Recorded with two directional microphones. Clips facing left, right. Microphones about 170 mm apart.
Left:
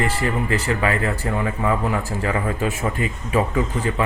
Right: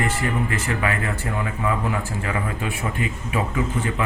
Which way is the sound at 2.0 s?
40° left (ahead or behind).